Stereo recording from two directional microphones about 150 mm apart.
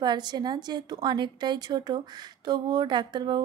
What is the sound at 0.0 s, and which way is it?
Speech, 30° right (ahead or behind).